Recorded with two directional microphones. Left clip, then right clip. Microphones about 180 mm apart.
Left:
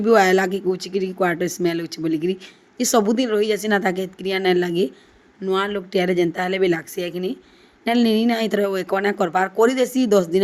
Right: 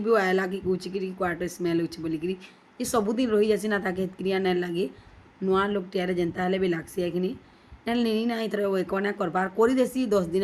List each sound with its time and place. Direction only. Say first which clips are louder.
0.0 s speech: left 8 dB; 40° left (ahead or behind)